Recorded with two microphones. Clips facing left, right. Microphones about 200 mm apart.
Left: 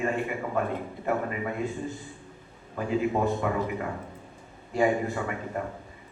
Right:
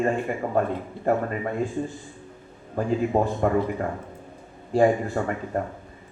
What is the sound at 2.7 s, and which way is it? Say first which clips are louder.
A man's voice: right 4 dB; 40° right (ahead or behind).